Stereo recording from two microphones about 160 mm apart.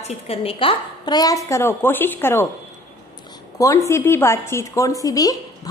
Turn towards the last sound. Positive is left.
turn(degrees=25)  # may be behind; listen again after turning